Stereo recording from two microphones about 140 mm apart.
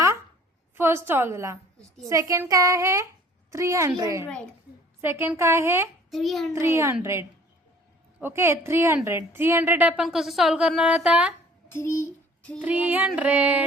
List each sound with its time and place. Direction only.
0.8 s a woman's voice: 15° right (ahead or behind)
6.1 s a child's voice: centre (ahead or behind)
6.5 s a child's voice: 20° right (ahead or behind)
11.7 s a child's voice: 20° left (ahead or behind)
12.6 s a woman's voice: 10° right (ahead or behind)